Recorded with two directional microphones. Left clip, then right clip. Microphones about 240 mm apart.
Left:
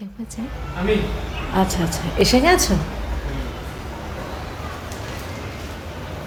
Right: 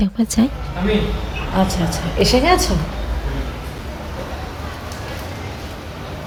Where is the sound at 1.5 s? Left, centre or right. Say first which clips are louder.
Right 1 dB; centre.